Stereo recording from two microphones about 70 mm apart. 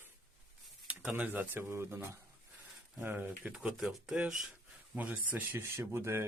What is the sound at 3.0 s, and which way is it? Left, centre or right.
Speech, right.